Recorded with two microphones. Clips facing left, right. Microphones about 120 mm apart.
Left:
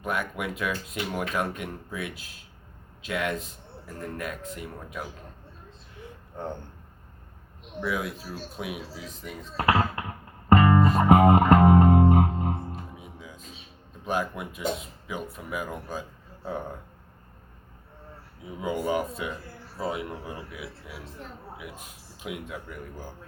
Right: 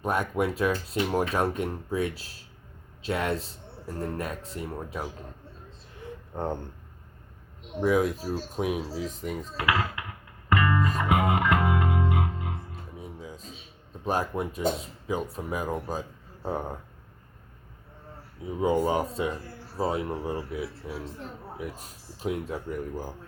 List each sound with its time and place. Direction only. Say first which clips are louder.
0.0 s speech: right 4 dB; 35° right (ahead or behind)
7.8 s speech: right 7 dB; 40° right (ahead or behind)
9.6 s music: left 5 dB; 40° left (ahead or behind)
13.0 s music: right 4 dB; 35° right (ahead or behind)
14.0 s speech: right 2 dB; 35° right (ahead or behind)
18.6 s speech: right 3 dB; 35° right (ahead or behind)